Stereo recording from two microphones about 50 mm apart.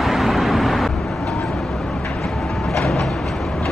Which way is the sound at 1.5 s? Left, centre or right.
Centre.